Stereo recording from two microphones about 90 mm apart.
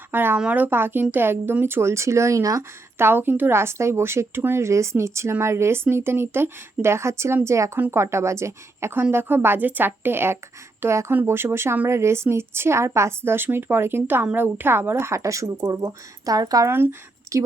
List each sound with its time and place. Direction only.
0.1 s a woman's voice: 25° right (ahead or behind)
3.0 s a woman's voice: 25° right (ahead or behind)
15.6 s speech: 50° right (ahead or behind)
16.6 s a woman's voice: 25° right (ahead or behind)